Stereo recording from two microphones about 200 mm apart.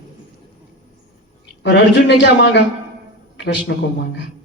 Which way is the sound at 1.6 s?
60° left (ahead or behind).